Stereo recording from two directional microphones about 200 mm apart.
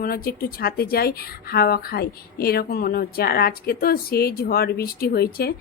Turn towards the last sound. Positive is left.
turn(degrees=50)  # may be behind; listen again after turning